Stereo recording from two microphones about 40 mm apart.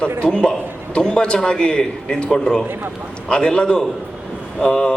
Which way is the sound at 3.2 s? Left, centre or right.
Left.